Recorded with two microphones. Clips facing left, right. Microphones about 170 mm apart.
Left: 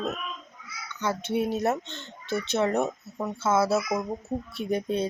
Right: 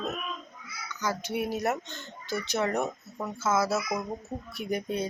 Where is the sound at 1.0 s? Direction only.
25° left (ahead or behind).